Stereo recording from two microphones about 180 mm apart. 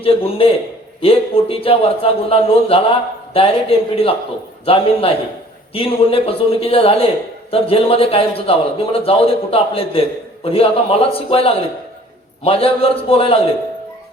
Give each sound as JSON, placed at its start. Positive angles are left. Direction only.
{"t": 0.0, "sound": "a man's voice", "side_deg": 30}